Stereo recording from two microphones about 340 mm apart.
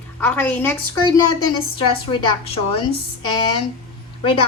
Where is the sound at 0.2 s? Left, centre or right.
Centre.